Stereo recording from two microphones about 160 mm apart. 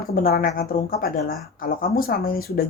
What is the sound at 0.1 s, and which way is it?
A woman's voice, 70° left (ahead or behind).